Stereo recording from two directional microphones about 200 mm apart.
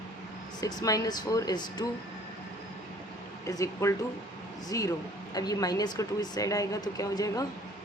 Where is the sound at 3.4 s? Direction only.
15° left (ahead or behind).